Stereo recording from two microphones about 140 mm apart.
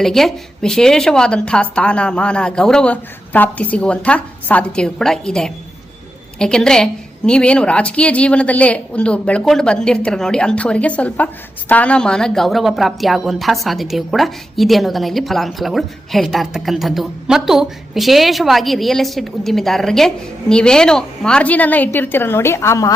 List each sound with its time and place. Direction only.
0.0 s a woman's voice: 5° left (ahead or behind); by 22.9 s 20° left (ahead or behind)